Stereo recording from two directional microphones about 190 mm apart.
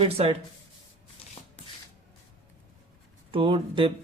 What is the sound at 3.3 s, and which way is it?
Speech, 25° right (ahead or behind).